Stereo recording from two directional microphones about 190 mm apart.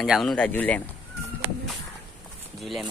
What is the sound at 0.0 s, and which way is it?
Speech, centre (ahead or behind).